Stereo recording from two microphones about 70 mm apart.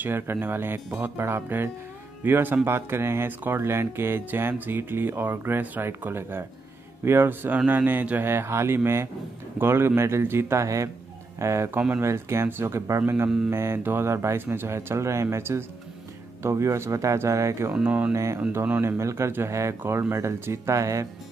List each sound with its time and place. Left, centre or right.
0.0 s speech: right
8.3 s speech: right
17.8 s speech: right
18.1 s speech: right
20.7 s speech: right